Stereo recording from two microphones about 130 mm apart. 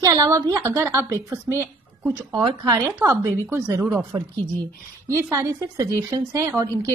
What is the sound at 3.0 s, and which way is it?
Speech, 20° right (ahead or behind).